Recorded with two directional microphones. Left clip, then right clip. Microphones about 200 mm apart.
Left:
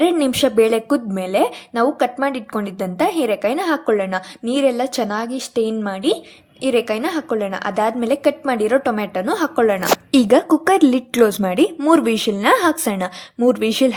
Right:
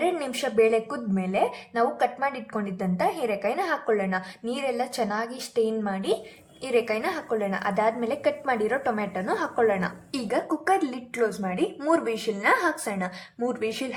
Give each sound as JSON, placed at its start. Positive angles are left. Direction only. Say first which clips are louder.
{"t": 0.0, "sound": "speech", "louder": "left 10 dB", "side_deg": 40}